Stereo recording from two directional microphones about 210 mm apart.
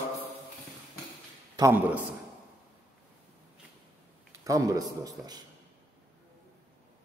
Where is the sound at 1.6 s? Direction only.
10° right (ahead or behind).